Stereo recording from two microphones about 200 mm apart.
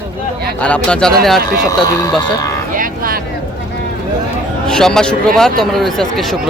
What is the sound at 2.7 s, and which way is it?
Vehicle, 45° right (ahead or behind).